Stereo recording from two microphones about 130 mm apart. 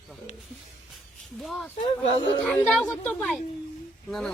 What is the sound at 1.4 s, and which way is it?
Speech, centre (ahead or behind).